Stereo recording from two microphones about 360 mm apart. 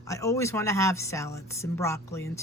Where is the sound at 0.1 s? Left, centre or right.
Centre.